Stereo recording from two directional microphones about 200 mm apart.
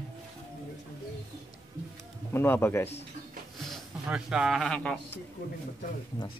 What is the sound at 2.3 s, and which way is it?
Speech, 10° left (ahead or behind).